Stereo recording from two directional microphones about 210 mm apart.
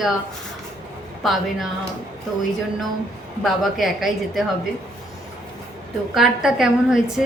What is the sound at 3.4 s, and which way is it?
Speech, centre (ahead or behind).